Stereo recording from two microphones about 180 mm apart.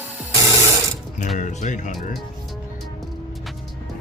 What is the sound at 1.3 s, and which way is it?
Speech, 45° left (ahead or behind).